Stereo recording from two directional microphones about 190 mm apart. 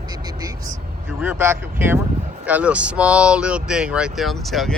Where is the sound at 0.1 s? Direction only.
20° right (ahead or behind).